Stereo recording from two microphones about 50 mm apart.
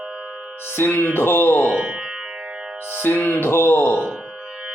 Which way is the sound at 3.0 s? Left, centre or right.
Left.